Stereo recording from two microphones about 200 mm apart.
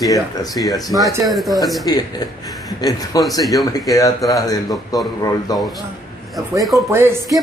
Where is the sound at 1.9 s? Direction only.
20° left (ahead or behind).